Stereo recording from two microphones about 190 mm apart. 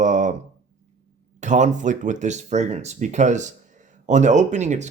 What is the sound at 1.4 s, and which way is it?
Speech, 40° right (ahead or behind).